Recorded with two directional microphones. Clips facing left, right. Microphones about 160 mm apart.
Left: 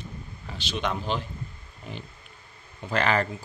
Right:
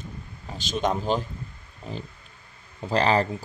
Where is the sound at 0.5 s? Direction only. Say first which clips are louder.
Right 4 dB; 45° right (ahead or behind).